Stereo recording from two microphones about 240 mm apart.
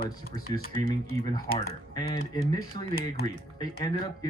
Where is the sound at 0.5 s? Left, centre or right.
Left.